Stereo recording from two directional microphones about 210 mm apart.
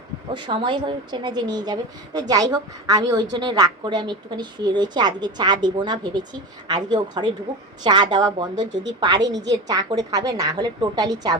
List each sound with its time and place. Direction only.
0.3 s a woman's voice: 25° right (ahead or behind)